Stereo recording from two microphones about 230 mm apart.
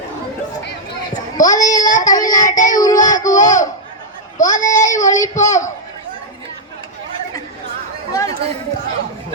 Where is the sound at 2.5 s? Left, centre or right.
Left.